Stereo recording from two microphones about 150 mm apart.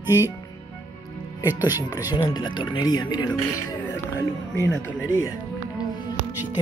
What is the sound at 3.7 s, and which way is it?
Music, 20° left (ahead or behind).